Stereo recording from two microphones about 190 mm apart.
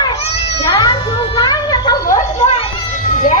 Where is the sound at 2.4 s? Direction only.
30° left (ahead or behind).